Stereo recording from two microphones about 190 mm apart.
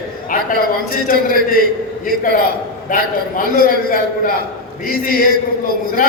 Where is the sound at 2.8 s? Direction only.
50° left (ahead or behind).